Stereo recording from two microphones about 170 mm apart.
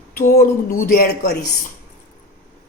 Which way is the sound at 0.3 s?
60° left (ahead or behind).